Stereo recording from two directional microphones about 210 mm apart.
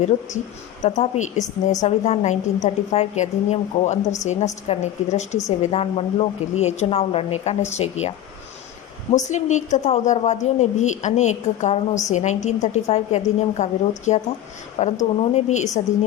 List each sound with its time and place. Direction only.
0.8 s a woman's voice: 35° left (ahead or behind)
9.1 s a woman's voice: 35° left (ahead or behind)